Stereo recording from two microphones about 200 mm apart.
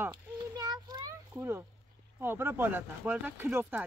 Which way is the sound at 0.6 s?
20° right (ahead or behind).